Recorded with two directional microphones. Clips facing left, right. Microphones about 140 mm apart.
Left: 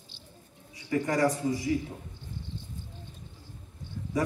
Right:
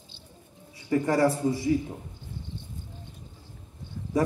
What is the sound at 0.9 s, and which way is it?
A man's voice, 30° right (ahead or behind).